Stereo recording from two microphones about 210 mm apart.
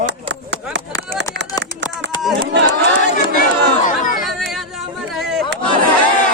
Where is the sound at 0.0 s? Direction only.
55° right (ahead or behind).